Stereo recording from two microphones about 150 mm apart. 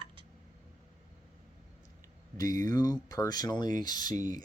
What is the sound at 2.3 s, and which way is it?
Speech, 25° left (ahead or behind).